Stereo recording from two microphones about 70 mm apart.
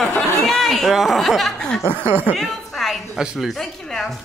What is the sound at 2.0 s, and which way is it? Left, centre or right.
Speech, right.